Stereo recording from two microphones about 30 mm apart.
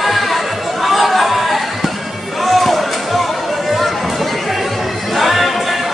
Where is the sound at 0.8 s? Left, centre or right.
Centre.